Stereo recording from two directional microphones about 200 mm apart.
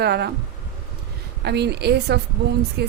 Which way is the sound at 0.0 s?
55° right (ahead or behind).